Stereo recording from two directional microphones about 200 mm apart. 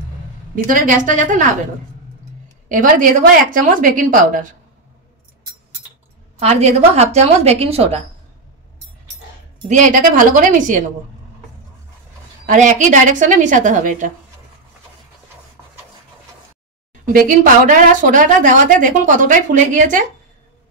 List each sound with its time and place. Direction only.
0.7 s a woman's voice: 40° right (ahead or behind)
2.7 s a woman's voice: 40° right (ahead or behind)
6.4 s a woman's voice: 30° right (ahead or behind)
9.7 s a woman's voice: 40° right (ahead or behind)
12.4 s a woman's voice: 40° right (ahead or behind)
17.1 s a woman's voice: 45° right (ahead or behind)